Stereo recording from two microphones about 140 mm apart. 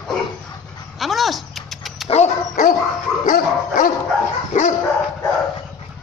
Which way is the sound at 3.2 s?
85° left.